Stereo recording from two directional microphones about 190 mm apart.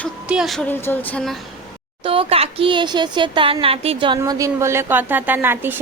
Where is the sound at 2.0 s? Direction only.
30° right (ahead or behind).